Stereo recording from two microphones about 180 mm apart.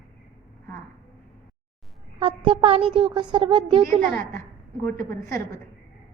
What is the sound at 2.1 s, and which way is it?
A child's voice, 30° right (ahead or behind).